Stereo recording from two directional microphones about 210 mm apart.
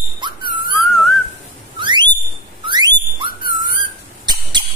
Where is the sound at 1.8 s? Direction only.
20° right (ahead or behind).